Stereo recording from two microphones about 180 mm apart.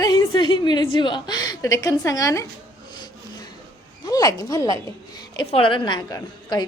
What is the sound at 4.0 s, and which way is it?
A woman's voice, 20° left (ahead or behind).